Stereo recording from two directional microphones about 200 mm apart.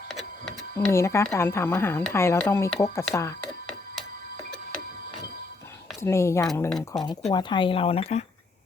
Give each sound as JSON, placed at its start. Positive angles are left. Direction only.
{"t": 0.9, "sound": "speech", "side_deg": 15}
{"t": 6.0, "sound": "speech", "side_deg": 15}
{"t": 6.7, "sound": "speech", "side_deg": 0}
{"t": 7.3, "sound": "speech", "side_deg": 25}